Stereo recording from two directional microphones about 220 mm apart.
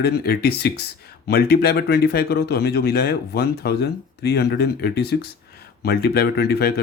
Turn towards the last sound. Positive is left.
turn(degrees=45)  # may be behind; listen again after turning